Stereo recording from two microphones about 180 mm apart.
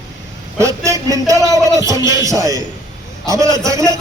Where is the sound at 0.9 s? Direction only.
20° right (ahead or behind).